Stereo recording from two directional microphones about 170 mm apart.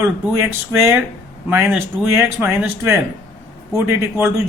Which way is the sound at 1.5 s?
15° right (ahead or behind).